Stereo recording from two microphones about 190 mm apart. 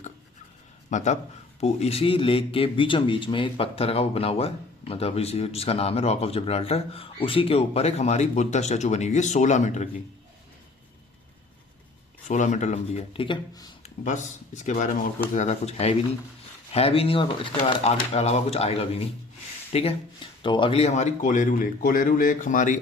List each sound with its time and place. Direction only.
0.9 s speech: 40° left (ahead or behind)
12.3 s speech: 40° left (ahead or behind)
13.8 s speech: 40° left (ahead or behind)